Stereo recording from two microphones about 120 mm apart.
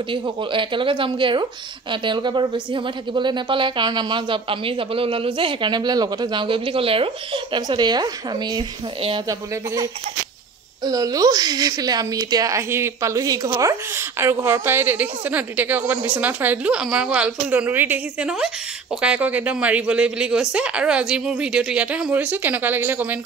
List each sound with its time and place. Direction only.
0.1 s speech: 45° right (ahead or behind)
10.8 s a woman's voice: 30° right (ahead or behind); by 23.1 s 15° right (ahead or behind)